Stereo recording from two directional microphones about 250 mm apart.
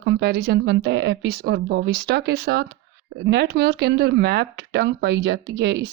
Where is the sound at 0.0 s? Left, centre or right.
Right.